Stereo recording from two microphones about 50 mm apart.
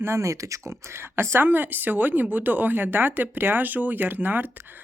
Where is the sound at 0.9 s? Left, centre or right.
Right.